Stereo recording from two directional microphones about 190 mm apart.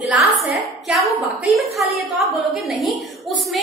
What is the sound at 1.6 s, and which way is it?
Speech, 35° right (ahead or behind).